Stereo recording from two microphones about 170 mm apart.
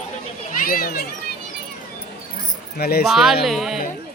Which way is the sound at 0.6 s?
60° left (ahead or behind).